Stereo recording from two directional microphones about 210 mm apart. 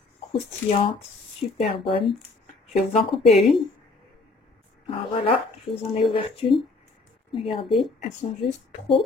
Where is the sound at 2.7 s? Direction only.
30° left (ahead or behind).